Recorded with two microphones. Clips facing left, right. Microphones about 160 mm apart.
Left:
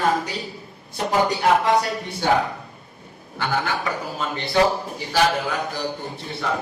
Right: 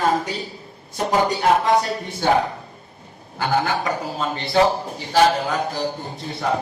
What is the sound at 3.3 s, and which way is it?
A man's voice, 40° right (ahead or behind).